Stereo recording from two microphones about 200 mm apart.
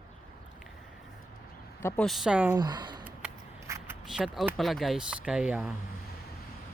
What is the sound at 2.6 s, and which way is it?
Speech, 20° right (ahead or behind).